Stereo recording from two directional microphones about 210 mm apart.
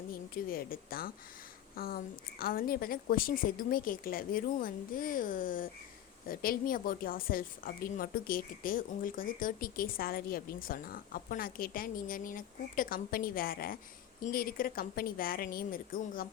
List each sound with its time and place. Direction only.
0.1 s a woman's voice: 45° left (ahead or behind)